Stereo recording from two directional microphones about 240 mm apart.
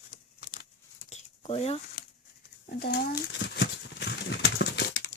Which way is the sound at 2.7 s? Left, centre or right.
Left.